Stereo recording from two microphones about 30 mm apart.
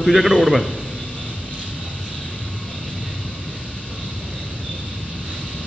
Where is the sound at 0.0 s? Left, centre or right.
Centre.